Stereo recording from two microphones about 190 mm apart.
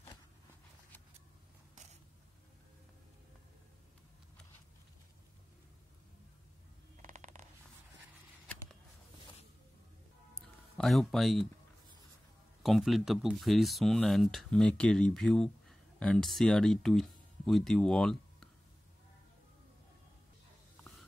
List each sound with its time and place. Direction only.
7.0 s mechanisms: 40° right (ahead or behind)
10.8 s speech: centre (ahead or behind)
12.6 s speech: centre (ahead or behind)